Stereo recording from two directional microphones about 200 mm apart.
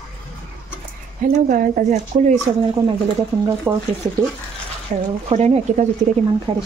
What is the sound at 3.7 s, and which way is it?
Speech, 15° right (ahead or behind).